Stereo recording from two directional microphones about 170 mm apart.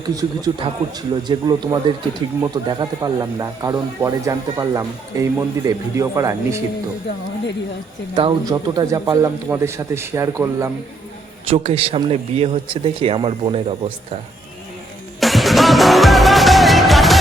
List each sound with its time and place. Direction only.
0.2 s speech: 25° right (ahead or behind)
8.1 s a man's voice: 25° right (ahead or behind)
11.4 s speech: 35° right (ahead or behind)
15.2 s music: centre (ahead or behind)